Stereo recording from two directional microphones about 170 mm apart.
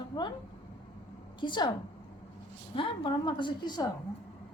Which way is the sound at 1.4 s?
25° left (ahead or behind).